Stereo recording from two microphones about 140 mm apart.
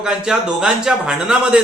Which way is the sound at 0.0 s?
5° right (ahead or behind).